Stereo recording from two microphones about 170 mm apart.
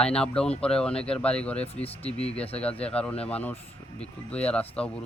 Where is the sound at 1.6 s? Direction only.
35° left (ahead or behind).